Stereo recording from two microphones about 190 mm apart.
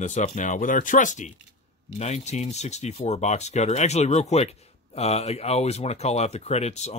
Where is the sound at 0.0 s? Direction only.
40° left (ahead or behind).